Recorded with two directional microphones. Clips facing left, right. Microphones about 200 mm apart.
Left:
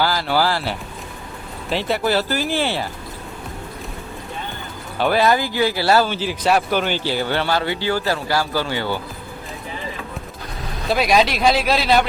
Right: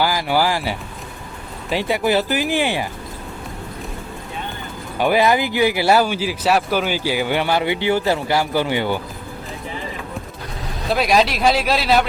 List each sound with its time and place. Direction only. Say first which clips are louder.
0.0 s speech: right 1 dB; 15° right (ahead or behind)
4.9 s speech: right 1 dB; 15° right (ahead or behind)
10.8 s speech: even; centre (ahead or behind)